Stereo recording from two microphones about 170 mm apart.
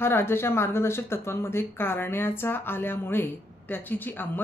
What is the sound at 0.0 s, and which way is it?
Speech, 15° left (ahead or behind).